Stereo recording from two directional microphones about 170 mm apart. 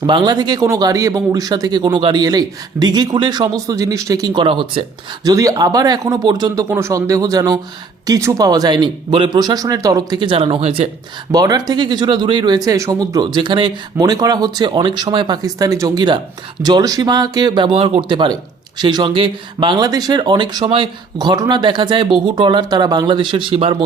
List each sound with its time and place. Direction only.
0.0 s speech: 25° right (ahead or behind)
5.3 s speech: 20° right (ahead or behind)
11.3 s speech: 20° right (ahead or behind)